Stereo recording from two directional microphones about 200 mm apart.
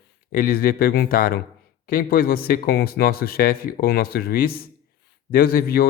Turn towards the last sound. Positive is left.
turn(degrees=50)  # may be behind; listen again after turning